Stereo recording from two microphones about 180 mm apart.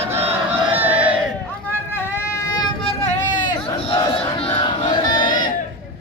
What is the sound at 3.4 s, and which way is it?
Battle cry, 25° left (ahead or behind).